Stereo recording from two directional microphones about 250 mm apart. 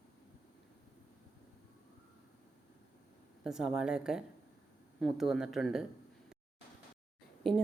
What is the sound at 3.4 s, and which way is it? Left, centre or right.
Speech, centre.